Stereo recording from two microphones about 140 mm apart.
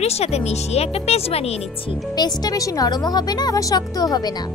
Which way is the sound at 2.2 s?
25° left (ahead or behind).